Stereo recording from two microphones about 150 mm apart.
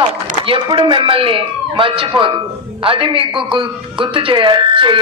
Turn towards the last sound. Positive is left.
turn(degrees=-35)  # may be behind; listen again after turning